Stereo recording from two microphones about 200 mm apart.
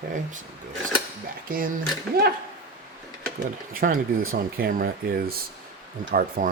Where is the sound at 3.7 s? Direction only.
45° right (ahead or behind).